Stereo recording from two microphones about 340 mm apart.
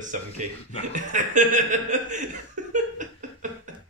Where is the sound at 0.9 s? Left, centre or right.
Right.